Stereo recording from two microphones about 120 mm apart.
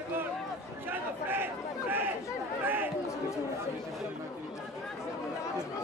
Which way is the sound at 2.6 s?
15° right (ahead or behind).